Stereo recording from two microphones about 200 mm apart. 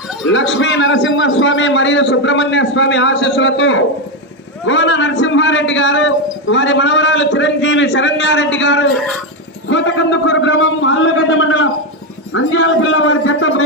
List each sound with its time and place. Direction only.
0.3 s a man's voice: 65° left (ahead or behind); by 13.7 s 90° left